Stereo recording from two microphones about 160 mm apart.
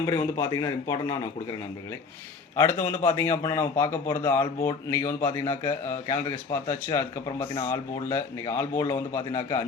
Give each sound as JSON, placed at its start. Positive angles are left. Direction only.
{"t": 0.0, "sound": "a man's voice", "side_deg": 20}
{"t": 2.6, "sound": "a man's voice", "side_deg": 20}